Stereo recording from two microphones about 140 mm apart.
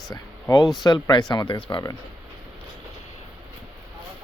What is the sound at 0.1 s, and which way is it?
Speech, 25° left (ahead or behind).